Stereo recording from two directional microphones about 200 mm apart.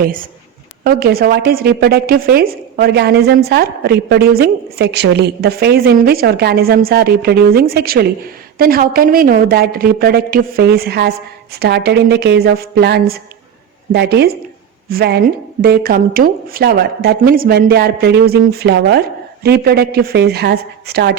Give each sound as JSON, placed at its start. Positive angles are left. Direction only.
{"t": 0.0, "sound": "a woman's voice", "side_deg": -45}